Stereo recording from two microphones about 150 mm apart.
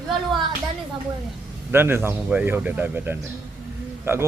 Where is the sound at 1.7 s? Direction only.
15° right (ahead or behind).